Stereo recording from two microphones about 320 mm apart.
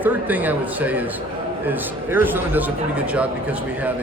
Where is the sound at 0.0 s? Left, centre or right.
Centre.